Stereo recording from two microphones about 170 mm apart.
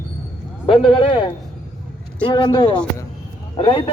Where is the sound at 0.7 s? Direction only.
30° left (ahead or behind).